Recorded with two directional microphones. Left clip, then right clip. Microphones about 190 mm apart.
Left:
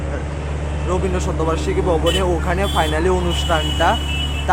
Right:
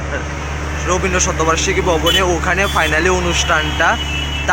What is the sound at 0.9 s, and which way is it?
Speech, 5° left (ahead or behind).